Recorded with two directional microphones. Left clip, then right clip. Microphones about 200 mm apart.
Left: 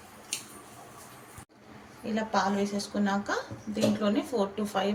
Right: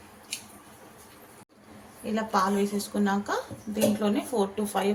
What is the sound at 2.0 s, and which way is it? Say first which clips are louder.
A woman's voice: right 2 dB; 20° right (ahead or behind).